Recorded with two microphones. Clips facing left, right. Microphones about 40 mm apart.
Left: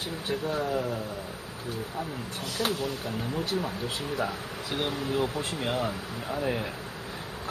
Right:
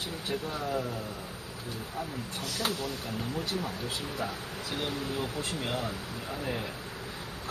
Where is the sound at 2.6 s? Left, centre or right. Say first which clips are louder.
Left 4 dB; left.